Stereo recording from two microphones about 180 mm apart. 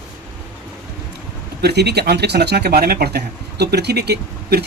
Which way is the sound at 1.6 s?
65° right (ahead or behind).